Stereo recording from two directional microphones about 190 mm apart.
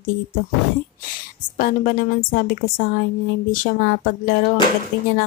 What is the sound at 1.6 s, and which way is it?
A woman's voice, 45° left (ahead or behind).